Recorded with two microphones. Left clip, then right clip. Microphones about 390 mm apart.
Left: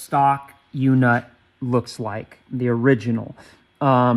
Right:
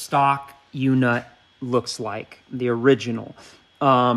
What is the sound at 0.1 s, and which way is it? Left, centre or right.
Speech, centre.